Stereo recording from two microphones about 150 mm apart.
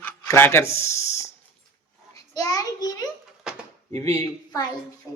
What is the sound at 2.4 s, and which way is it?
Speech, 25° left (ahead or behind).